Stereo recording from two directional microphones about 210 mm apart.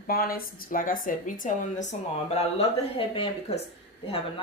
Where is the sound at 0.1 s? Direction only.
45° left (ahead or behind).